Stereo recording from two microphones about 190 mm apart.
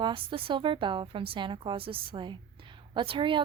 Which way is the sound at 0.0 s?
25° right (ahead or behind).